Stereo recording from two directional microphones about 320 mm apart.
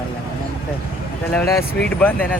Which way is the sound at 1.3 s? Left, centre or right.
Centre.